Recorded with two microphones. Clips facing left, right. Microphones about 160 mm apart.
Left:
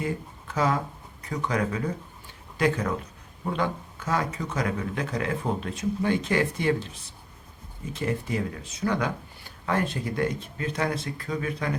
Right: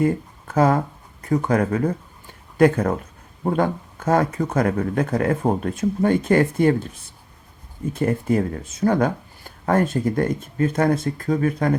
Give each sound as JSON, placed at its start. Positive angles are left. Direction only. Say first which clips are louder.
{"t": 0.0, "sound": "speech", "louder": "right 10 dB", "side_deg": -50}
{"t": 7.9, "sound": "speech", "louder": "right 8 dB", "side_deg": -50}